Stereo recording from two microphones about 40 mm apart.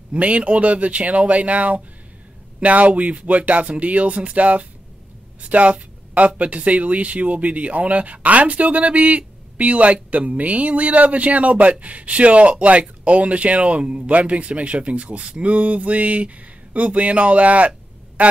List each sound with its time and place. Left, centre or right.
0.1 s speech: right